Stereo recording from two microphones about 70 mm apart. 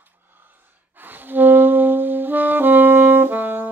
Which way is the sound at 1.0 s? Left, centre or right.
Right.